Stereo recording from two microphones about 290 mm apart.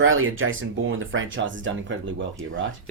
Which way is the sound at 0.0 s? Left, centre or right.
Right.